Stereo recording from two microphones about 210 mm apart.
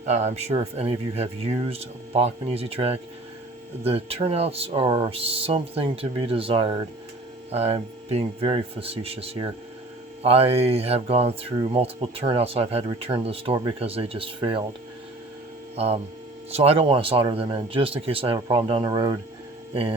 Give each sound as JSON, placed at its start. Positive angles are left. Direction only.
{"t": 0.0, "sound": "speech", "side_deg": -35}
{"t": 15.7, "sound": "speech", "side_deg": -30}